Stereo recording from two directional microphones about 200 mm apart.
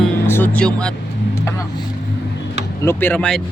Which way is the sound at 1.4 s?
15° left (ahead or behind).